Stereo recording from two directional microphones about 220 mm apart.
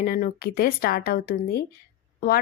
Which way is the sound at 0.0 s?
45° left (ahead or behind).